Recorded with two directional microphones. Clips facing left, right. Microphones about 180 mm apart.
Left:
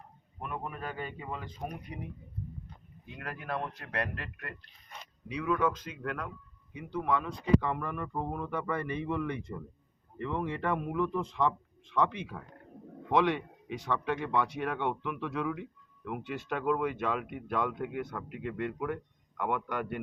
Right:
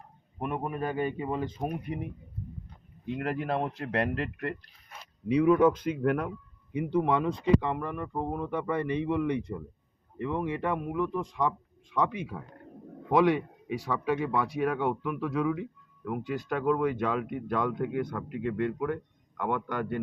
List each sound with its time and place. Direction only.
0.3 s speech: 20° right (ahead or behind)
3.2 s speech: 25° right (ahead or behind)
6.9 s a man's voice: 25° right (ahead or behind); by 20.0 s 10° left (ahead or behind)